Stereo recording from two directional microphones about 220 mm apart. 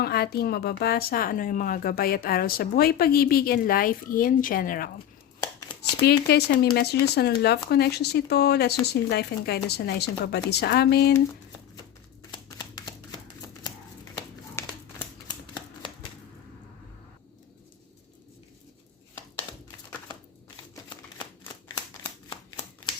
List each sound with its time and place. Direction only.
0.0 s a woman's voice: 45° left (ahead or behind)
5.5 s a sound: 20° left (ahead or behind)
6.1 s a woman's voice: 45° left (ahead or behind)
12.3 s shuffling cards: 20° left (ahead or behind)
14.6 s crumpling: 10° left (ahead or behind)
15.8 s typewriter: 20° left (ahead or behind)
21.2 s shuffling cards: 15° left (ahead or behind)